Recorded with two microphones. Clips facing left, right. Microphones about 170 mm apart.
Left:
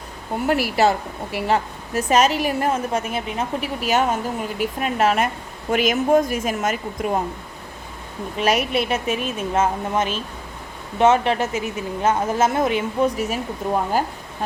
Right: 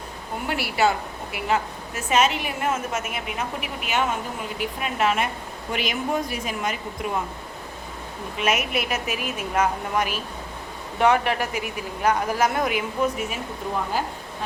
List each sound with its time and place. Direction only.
0.4 s a woman's voice: 40° left (ahead or behind)
8.4 s a woman's voice: 35° left (ahead or behind)